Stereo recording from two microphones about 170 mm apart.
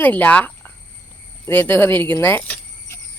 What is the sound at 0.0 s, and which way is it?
Speech, 10° left (ahead or behind).